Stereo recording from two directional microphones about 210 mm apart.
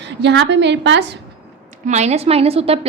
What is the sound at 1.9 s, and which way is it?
Speech, 30° right (ahead or behind).